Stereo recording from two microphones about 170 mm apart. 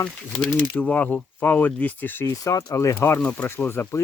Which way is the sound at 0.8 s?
10° left (ahead or behind).